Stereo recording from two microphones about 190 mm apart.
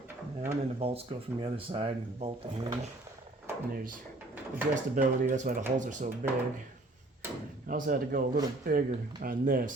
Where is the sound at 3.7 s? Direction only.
50° right (ahead or behind).